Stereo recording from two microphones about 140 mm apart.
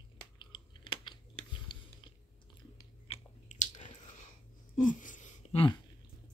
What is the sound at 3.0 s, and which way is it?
Biting, 55° left (ahead or behind).